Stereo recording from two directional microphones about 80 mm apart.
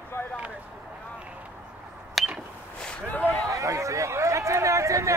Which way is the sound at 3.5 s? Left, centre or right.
Right.